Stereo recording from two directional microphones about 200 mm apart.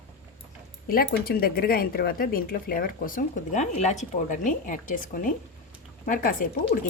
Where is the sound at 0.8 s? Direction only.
50° left (ahead or behind).